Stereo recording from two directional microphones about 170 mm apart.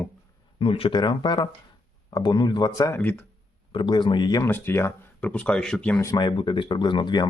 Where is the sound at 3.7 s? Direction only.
30° left (ahead or behind); by 6.0 s 10° left (ahead or behind).